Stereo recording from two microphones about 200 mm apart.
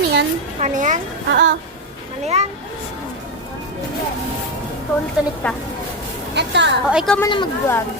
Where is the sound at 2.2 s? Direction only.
35° right (ahead or behind).